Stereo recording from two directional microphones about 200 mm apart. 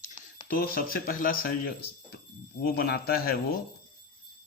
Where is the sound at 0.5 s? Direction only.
50° left (ahead or behind).